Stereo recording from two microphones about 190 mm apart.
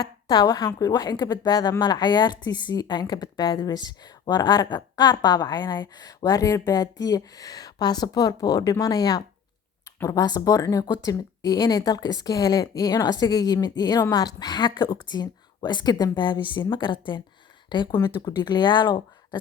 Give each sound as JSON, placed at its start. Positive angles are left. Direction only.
{"t": 0.0, "sound": "speech", "side_deg": 20}